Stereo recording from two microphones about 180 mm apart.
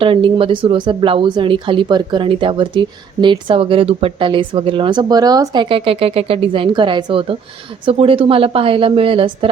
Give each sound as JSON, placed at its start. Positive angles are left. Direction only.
{"t": 0.0, "sound": "a woman's voice", "side_deg": -30}